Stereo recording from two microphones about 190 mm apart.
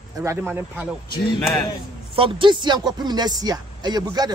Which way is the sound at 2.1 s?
25° right (ahead or behind).